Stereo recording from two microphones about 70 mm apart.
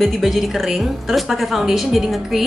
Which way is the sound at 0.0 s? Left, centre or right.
Centre.